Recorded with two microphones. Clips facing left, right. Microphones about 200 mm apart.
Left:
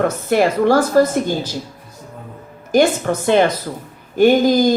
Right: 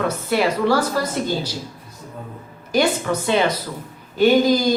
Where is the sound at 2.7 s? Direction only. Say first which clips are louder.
Left 4 dB; 50° left (ahead or behind).